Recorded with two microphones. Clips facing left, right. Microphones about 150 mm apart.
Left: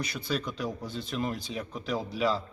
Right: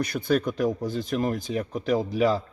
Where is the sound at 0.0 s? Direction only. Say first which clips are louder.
Right 8 dB; 50° right (ahead or behind).